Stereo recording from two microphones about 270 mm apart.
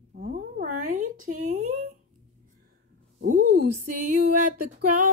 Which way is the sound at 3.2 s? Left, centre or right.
Right.